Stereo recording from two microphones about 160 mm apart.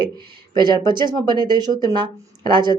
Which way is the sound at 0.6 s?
25° right (ahead or behind).